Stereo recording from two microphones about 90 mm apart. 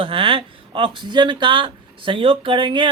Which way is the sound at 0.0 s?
80° right.